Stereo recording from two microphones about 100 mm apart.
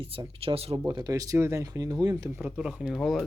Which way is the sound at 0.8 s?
45° right (ahead or behind).